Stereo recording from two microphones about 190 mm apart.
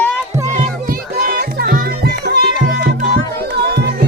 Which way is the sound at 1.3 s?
55° right (ahead or behind).